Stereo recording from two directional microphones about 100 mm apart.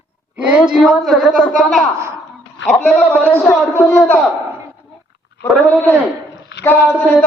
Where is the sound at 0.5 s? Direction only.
5° right (ahead or behind).